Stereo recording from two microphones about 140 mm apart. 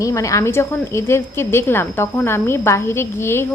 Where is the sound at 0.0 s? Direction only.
20° left (ahead or behind).